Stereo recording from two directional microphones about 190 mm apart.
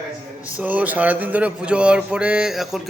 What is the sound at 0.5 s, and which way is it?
Speech, 10° right (ahead or behind).